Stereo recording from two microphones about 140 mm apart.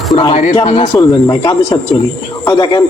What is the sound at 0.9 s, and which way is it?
Speech, 25° left (ahead or behind).